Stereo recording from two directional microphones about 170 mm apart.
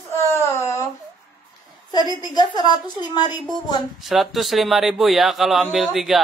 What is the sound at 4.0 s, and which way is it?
Speech, centre (ahead or behind).